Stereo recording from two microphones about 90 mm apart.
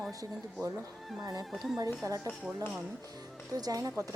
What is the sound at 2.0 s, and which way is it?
Speech, 35° right (ahead or behind).